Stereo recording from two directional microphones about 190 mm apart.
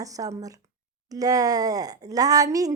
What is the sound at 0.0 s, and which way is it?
Speech, 20° right (ahead or behind).